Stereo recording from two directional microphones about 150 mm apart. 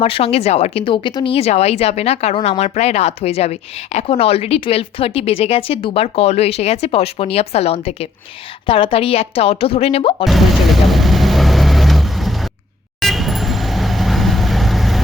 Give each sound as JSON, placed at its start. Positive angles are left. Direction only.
{"t": 0.0, "sound": "speech", "side_deg": 40}
{"t": 10.2, "sound": "vehicle", "side_deg": 0}